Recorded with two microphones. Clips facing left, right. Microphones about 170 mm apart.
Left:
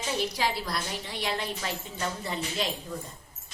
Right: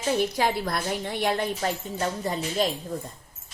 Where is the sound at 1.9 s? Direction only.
40° right (ahead or behind).